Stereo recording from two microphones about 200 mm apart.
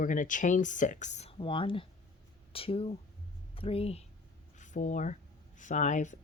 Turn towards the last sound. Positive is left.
turn(degrees=35)  # may be behind; listen again after turning